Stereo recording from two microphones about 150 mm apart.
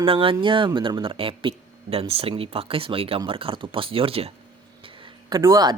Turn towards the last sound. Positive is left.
turn(degrees=-25)  # may be behind; listen again after turning